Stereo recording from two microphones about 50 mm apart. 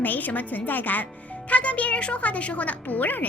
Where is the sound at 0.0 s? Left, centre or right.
Left.